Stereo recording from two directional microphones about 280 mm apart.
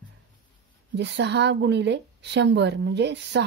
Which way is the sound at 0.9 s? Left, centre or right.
Right.